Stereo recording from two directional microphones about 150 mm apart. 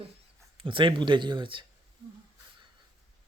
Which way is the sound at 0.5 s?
35° right (ahead or behind).